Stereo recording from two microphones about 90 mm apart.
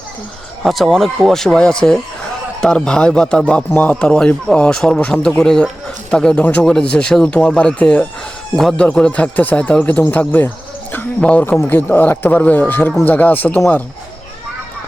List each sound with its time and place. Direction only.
0.6 s a man's voice: centre (ahead or behind); by 13.6 s 20° left (ahead or behind)